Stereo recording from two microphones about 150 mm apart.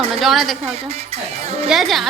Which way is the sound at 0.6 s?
45° right (ahead or behind).